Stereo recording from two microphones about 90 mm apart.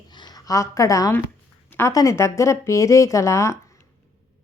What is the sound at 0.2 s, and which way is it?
A woman's voice, 50° left (ahead or behind).